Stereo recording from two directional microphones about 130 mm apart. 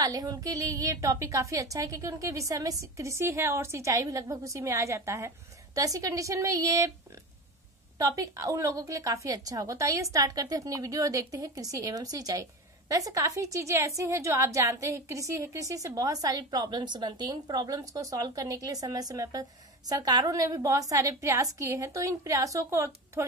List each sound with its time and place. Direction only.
0.0 s a woman's voice: 30° right (ahead or behind)
8.0 s a woman's voice: 25° right (ahead or behind)